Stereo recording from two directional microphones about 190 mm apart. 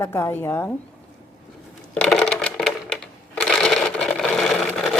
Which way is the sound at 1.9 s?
5° left (ahead or behind).